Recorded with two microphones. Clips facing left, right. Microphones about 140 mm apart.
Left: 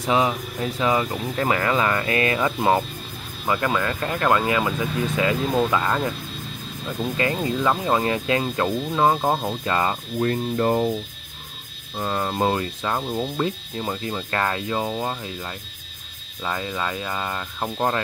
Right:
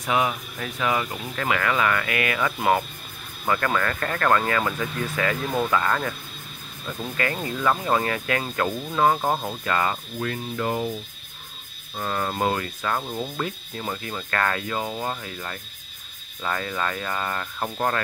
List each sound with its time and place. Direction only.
0.0 s music: 25° left (ahead or behind)
3.4 s speech: 15° left (ahead or behind)
7.0 s music: 20° left (ahead or behind)
10.2 s music: 35° left (ahead or behind)
12.0 s music: 20° left (ahead or behind)
16.4 s speech: 15° left (ahead or behind)